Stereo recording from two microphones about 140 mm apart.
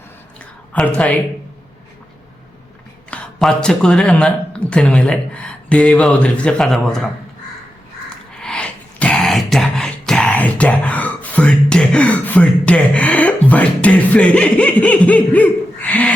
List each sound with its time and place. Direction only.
0.7 s speech: 10° left (ahead or behind)
3.1 s speech: 10° left (ahead or behind)
8.4 s throat clearing: 5° left (ahead or behind)